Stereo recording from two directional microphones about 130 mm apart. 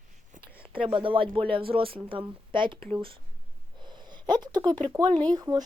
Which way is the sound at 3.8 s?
35° right (ahead or behind).